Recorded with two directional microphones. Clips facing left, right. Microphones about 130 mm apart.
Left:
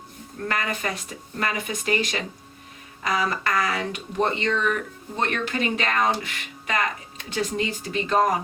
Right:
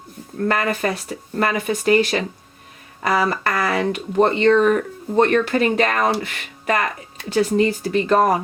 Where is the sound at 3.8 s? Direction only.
40° right (ahead or behind); by 6.9 s 55° right (ahead or behind).